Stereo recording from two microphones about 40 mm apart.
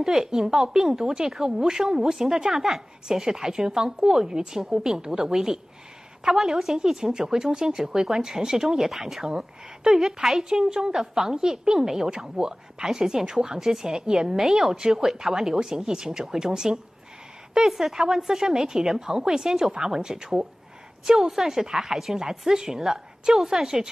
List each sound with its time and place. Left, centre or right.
0.0 s speech: centre